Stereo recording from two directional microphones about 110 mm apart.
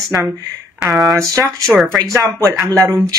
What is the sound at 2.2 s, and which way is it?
Speech, 30° right (ahead or behind).